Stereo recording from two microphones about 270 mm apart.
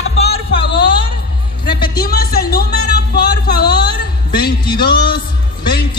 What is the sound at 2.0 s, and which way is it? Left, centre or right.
Speech, left.